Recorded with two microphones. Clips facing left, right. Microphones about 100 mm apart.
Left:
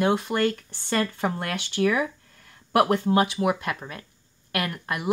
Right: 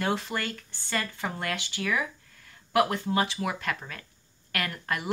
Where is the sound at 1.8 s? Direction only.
35° left (ahead or behind).